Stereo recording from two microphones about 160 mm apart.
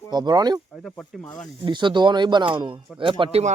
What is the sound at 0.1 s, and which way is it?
Speech, 25° right (ahead or behind).